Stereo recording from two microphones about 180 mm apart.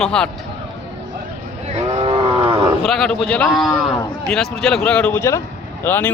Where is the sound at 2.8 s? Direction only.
Centre (ahead or behind).